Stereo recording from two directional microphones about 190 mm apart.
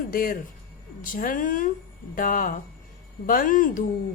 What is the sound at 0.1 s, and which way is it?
A woman's voice, 50° left (ahead or behind).